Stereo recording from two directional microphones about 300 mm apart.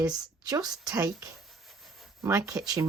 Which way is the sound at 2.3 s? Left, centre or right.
Centre.